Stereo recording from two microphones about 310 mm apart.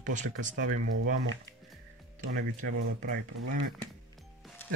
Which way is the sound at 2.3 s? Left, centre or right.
Right.